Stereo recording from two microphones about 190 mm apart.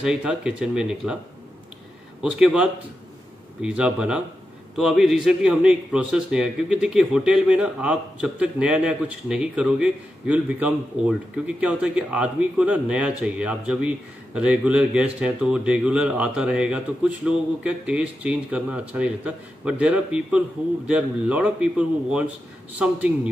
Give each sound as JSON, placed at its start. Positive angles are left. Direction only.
{"t": 0.0, "sound": "a man's voice", "side_deg": -5}
{"t": 2.2, "sound": "a man's voice", "side_deg": -5}